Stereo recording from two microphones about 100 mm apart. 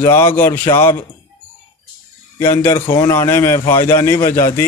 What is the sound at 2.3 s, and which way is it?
Speech, 40° left (ahead or behind).